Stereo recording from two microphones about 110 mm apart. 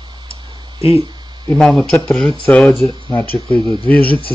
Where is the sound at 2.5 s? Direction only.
10° left (ahead or behind).